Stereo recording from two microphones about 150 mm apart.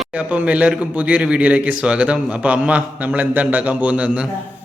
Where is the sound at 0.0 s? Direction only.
10° right (ahead or behind).